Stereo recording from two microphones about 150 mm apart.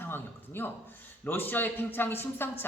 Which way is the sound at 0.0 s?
15° left (ahead or behind).